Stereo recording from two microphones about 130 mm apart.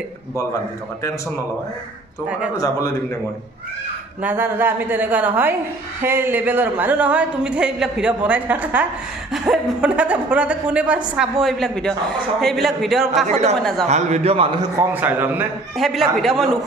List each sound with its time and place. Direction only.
2.5 s a man's voice: 25° left (ahead or behind)
4.2 s a woman's voice: 15° right (ahead or behind)
13.3 s a man's voice: 60° right (ahead or behind)
13.6 s a woman's voice: 5° left (ahead or behind)
13.8 s a man's voice: 60° right (ahead or behind)
15.0 s a woman's voice: 15° right (ahead or behind)
15.8 s a woman's voice: centre (ahead or behind)